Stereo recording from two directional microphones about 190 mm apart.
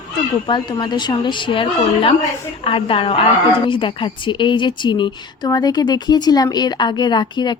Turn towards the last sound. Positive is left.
turn(degrees=25)  # may be behind; listen again after turning